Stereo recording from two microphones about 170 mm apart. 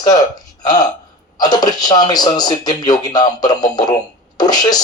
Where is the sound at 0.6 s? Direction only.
25° left (ahead or behind).